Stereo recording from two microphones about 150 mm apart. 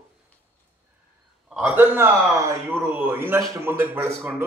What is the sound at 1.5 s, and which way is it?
A man's voice, 5° right (ahead or behind).